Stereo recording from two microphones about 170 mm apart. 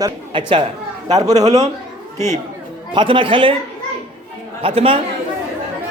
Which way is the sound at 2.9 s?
30° right (ahead or behind).